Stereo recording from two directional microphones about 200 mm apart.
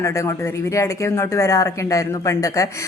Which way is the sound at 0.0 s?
15° left (ahead or behind).